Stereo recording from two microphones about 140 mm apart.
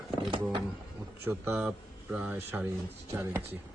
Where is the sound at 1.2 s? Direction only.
20° right (ahead or behind).